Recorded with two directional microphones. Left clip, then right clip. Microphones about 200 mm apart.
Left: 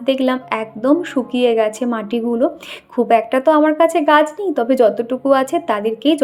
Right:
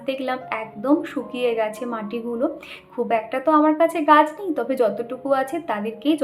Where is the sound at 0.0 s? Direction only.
35° left (ahead or behind).